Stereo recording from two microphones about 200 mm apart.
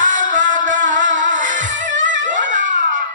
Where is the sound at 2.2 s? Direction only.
40° right (ahead or behind).